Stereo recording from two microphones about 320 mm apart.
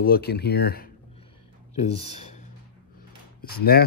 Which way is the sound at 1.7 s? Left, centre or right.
Centre.